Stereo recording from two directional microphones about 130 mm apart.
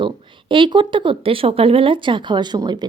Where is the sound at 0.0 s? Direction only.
40° right (ahead or behind).